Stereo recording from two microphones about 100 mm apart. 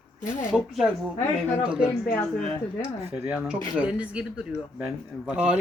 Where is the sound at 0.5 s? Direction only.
5° right (ahead or behind).